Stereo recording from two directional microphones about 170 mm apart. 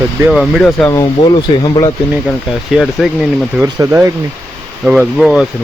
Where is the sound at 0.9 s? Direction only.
20° left (ahead or behind).